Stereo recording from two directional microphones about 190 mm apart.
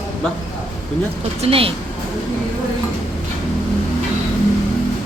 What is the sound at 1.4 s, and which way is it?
Speech, 30° right (ahead or behind).